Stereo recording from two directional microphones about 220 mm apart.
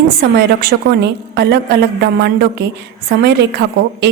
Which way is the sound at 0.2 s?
45° right (ahead or behind).